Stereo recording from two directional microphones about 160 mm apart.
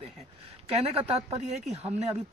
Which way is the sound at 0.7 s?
40° right (ahead or behind).